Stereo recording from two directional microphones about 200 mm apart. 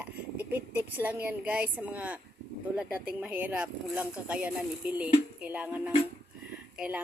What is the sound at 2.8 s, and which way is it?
Speech, 5° right (ahead or behind).